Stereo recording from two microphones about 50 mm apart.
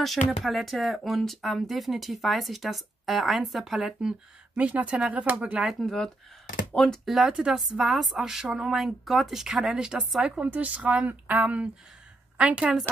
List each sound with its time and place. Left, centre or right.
0.0 s speech: centre
4.6 s speech: right
5.8 s speech: centre
7.1 s speech: centre
7.8 s speech: centre
10.4 s a woman's voice: right